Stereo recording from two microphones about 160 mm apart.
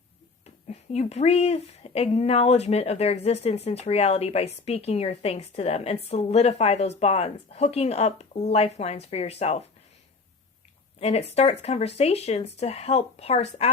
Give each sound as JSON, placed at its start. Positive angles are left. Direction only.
{"t": 0.7, "sound": "speech", "side_deg": 45}
{"t": 11.0, "sound": "speech", "side_deg": 40}